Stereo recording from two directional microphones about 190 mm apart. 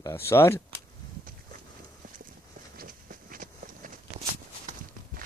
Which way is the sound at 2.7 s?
50° right (ahead or behind).